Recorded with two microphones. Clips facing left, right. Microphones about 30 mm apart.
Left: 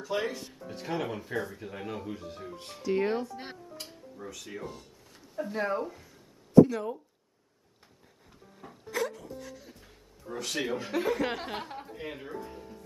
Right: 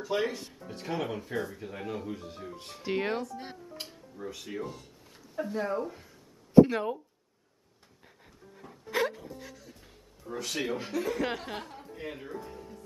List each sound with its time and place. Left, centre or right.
0.0 s speech: centre
2.8 s speech: right
3.3 s speech: left
3.8 s music: right
4.2 s speech: centre
5.5 s speech: centre
6.6 s speech: right
8.9 s dog: right
10.2 s speech: centre